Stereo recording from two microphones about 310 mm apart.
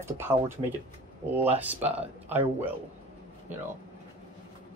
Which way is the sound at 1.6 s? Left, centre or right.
Centre.